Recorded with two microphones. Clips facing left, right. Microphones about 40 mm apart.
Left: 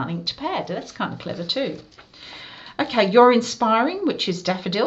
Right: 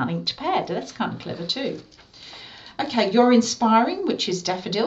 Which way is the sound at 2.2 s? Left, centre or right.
Left.